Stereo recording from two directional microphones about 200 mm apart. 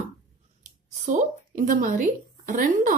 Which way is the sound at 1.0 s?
40° right (ahead or behind).